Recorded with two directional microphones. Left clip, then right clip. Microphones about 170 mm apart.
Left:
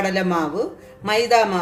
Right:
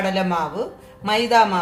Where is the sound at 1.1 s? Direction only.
45° left (ahead or behind).